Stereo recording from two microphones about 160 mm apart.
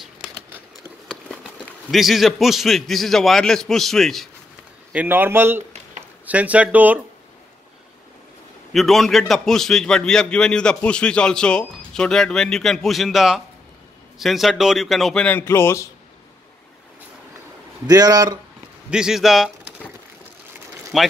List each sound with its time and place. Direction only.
0.0 s a sound: 5° right (ahead or behind)
1.0 s a man's voice: centre (ahead or behind)
4.9 s speech: 10° right (ahead or behind)
8.7 s a man's voice: centre (ahead or behind); by 15.9 s 15° left (ahead or behind)
17.8 s speech: 25° right (ahead or behind)
18.9 s a man's voice: 5° right (ahead or behind)
20.9 s a man's voice: centre (ahead or behind)